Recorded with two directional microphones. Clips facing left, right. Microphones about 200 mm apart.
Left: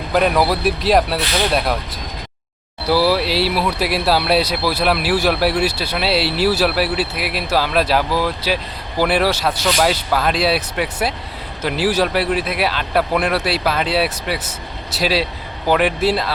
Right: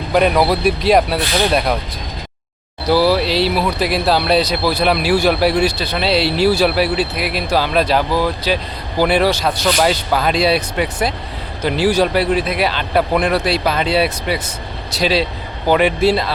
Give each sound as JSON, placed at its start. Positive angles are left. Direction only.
{"t": 0.1, "sound": "speech", "side_deg": 0}
{"t": 2.9, "sound": "speech", "side_deg": 5}